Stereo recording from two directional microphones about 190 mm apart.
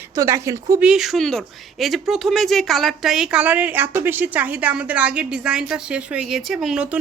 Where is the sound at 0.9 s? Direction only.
Centre (ahead or behind).